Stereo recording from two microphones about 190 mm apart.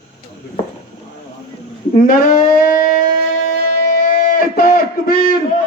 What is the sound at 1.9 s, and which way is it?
Speech, 45° left (ahead or behind).